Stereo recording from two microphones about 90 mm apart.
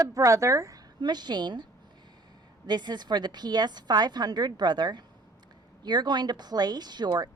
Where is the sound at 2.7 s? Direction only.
50° right (ahead or behind).